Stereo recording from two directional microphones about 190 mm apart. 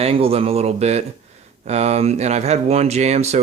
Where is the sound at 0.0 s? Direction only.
30° right (ahead or behind).